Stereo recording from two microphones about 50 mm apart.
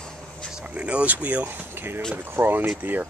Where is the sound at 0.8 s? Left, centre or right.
Right.